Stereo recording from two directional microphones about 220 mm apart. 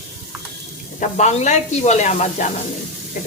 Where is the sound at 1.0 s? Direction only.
30° left (ahead or behind).